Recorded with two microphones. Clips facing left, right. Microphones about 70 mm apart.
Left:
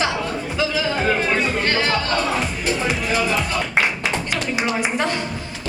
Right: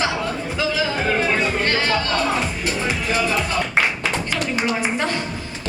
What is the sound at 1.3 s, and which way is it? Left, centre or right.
Music, centre.